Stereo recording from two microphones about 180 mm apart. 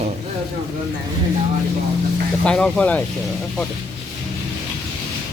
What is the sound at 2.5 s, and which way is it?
Speech, 5° left (ahead or behind).